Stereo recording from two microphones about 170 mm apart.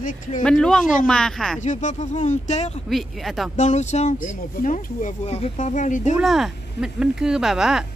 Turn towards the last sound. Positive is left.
turn(degrees=-5)  # may be behind; listen again after turning